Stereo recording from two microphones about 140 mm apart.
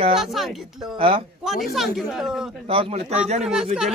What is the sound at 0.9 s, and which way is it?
Speech, 40° right (ahead or behind).